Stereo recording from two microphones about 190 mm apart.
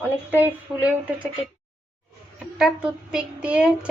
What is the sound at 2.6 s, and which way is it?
A child's voice, 5° right (ahead or behind).